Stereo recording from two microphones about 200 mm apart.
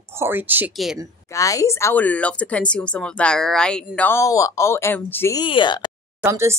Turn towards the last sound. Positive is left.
turn(degrees=-15)  # may be behind; listen again after turning